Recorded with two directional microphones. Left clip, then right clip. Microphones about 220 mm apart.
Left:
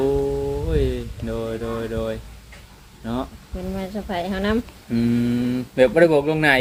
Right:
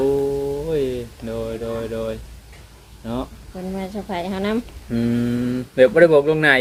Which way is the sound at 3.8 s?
20° right (ahead or behind).